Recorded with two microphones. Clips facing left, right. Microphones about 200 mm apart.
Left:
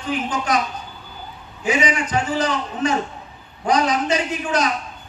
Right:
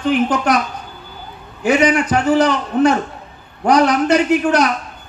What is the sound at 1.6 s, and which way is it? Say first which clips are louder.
A man's voice: right 7 dB; 65° right (ahead or behind).